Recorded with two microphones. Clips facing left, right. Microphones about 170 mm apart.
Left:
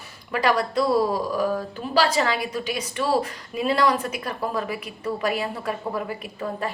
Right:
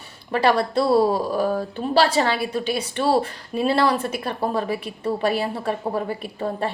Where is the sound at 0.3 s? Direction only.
30° right (ahead or behind).